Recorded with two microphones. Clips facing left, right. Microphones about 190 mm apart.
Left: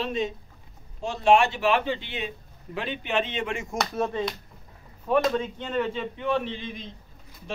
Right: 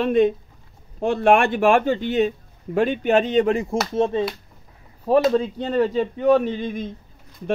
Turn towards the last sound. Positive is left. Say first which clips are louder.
# right 9 dB
turn(degrees=-50)  # may be behind; listen again after turning